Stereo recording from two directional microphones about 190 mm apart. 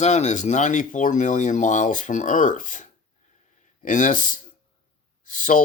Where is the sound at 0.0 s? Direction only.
35° left (ahead or behind).